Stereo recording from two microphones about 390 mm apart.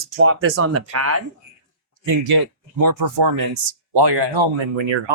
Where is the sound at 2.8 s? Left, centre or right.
Right.